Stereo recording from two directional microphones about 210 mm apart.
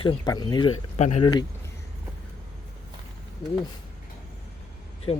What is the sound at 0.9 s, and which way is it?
Speech, 30° left (ahead or behind).